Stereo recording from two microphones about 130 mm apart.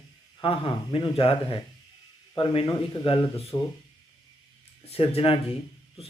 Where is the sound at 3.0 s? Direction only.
45° left (ahead or behind).